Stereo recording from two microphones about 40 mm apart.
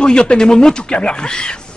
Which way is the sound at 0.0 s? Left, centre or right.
Left.